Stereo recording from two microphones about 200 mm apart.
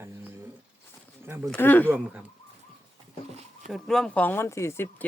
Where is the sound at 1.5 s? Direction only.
10° left (ahead or behind).